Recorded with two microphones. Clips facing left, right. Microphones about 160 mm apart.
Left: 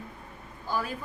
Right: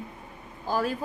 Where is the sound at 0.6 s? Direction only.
40° right (ahead or behind).